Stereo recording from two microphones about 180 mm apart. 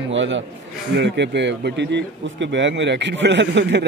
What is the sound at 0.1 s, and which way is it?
Speech, 90° right.